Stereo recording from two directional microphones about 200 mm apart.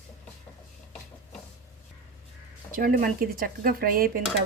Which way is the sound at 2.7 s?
45° right (ahead or behind).